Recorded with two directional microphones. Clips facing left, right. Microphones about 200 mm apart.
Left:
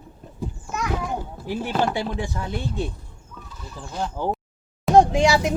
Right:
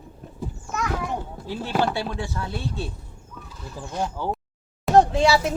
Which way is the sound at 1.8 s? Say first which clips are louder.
Left 1 dB; 15° left (ahead or behind).